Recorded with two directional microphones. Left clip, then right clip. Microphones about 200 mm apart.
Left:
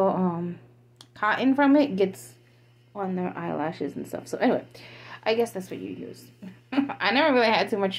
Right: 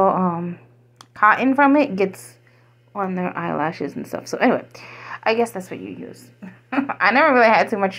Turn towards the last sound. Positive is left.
turn(degrees=-20)  # may be behind; listen again after turning